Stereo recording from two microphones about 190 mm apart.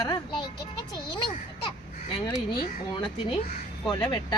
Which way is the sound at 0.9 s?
25° left (ahead or behind).